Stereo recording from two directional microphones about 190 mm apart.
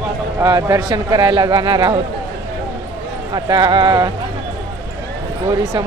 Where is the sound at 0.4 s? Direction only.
15° right (ahead or behind).